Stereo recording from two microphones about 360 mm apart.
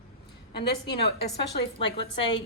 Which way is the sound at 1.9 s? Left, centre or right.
Centre.